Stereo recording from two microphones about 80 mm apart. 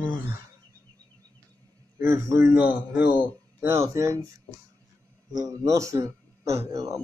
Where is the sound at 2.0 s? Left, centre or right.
Right.